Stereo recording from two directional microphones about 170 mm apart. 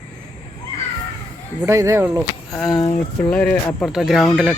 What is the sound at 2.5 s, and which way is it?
Speech, centre (ahead or behind).